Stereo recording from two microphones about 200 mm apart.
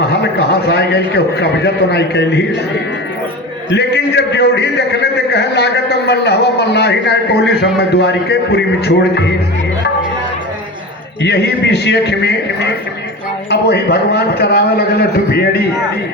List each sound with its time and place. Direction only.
0.2 s a man's voice: 55° left (ahead or behind)
3.7 s a man's voice: 55° left (ahead or behind)
11.2 s a man's voice: 55° left (ahead or behind)